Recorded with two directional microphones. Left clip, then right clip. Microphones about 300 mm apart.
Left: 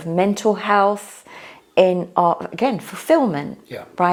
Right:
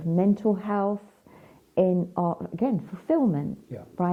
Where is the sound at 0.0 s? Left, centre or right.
Centre.